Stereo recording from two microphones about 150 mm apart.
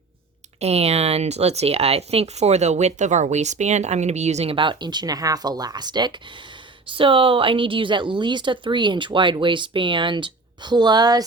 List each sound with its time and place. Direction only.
0.6 s a woman's voice: 45° right (ahead or behind); by 11.2 s 25° right (ahead or behind)